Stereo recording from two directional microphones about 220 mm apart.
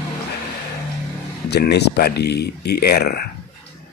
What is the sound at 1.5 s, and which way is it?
Speech, 50° left (ahead or behind).